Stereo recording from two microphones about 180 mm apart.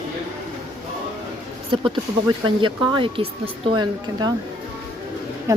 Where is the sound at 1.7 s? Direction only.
30° right (ahead or behind).